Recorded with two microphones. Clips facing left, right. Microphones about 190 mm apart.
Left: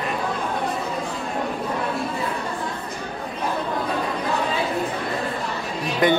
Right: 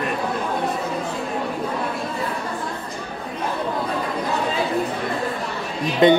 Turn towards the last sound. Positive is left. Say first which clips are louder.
# right 5 dB
turn(degrees=-25)  # may be behind; listen again after turning